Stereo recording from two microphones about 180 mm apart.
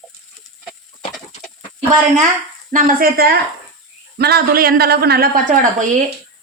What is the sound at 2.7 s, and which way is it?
A woman's voice, 50° right (ahead or behind).